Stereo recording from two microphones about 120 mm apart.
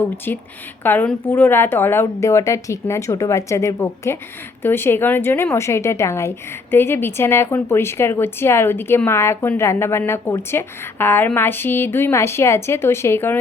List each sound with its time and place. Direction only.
0.3 s a woman's voice: 15° left (ahead or behind)